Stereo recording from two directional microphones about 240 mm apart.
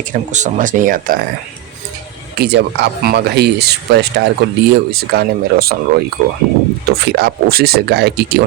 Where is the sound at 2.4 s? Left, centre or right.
Right.